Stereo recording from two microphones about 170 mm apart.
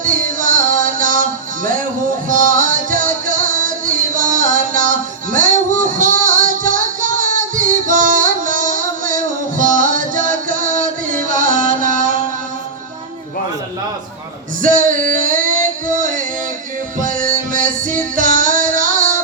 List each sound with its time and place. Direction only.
0.0 s music: 50° right (ahead or behind)
2.3 s music: 50° right (ahead or behind)
14.6 s music: 50° right (ahead or behind)